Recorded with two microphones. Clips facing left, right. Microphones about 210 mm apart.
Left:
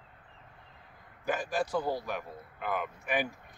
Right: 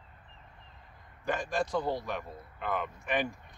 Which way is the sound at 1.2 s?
5° left (ahead or behind).